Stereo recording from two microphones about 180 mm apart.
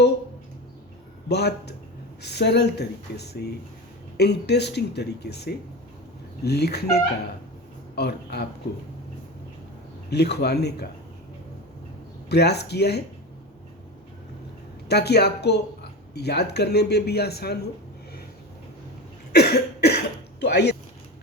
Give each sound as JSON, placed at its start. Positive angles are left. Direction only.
{"t": 1.3, "sound": "speech", "side_deg": 65}
{"t": 10.1, "sound": "speech", "side_deg": 65}
{"t": 12.3, "sound": "speech", "side_deg": 65}
{"t": 14.8, "sound": "speech", "side_deg": 65}
{"t": 19.3, "sound": "cough", "side_deg": 65}
{"t": 20.4, "sound": "speech", "side_deg": 65}